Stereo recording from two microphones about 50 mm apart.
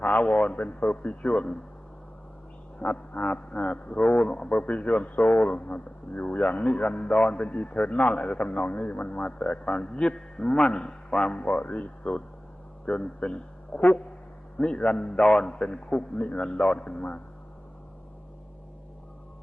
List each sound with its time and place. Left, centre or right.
0.0 s a man's voice: left
2.8 s a man's voice: left
4.3 s a man's voice: centre